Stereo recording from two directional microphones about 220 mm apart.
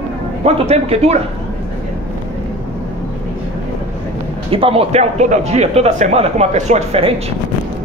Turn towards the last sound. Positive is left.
turn(degrees=-30)  # may be behind; listen again after turning